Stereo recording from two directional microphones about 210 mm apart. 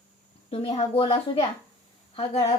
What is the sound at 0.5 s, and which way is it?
A woman's voice, 30° left (ahead or behind).